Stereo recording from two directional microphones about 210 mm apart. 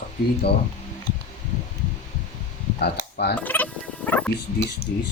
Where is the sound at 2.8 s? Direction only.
50° left (ahead or behind).